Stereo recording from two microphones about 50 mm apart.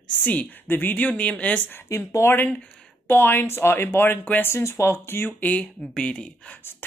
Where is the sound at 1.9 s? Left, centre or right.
Left.